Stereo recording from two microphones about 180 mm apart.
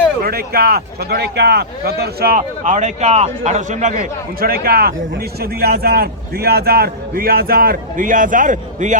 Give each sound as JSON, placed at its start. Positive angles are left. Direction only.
{"t": 0.2, "sound": "speech", "side_deg": -55}